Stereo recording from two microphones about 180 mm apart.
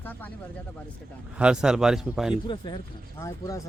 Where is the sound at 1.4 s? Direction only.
5° right (ahead or behind).